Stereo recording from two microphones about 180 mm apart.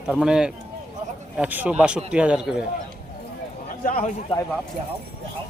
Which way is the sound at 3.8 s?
50° left (ahead or behind).